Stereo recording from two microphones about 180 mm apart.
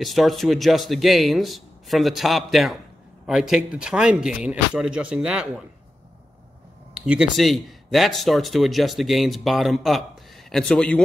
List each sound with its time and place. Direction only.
0.0 s speech: centre (ahead or behind)
6.9 s speech: 5° right (ahead or behind)